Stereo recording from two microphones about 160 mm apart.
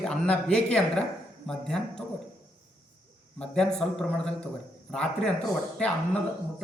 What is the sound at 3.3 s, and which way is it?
A man's voice, 5° left (ahead or behind).